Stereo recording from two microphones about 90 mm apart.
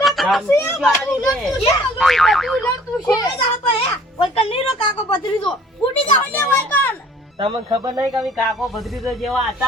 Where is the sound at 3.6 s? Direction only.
80° left.